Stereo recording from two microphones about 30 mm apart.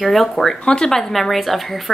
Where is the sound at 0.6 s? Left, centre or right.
Left.